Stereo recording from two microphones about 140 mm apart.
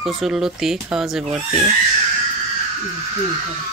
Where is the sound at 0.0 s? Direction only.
Centre (ahead or behind).